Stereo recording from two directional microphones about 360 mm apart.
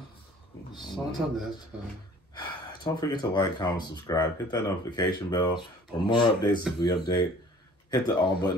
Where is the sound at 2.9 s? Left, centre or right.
Centre.